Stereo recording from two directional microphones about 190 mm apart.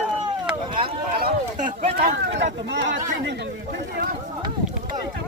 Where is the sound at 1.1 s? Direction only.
45° right (ahead or behind).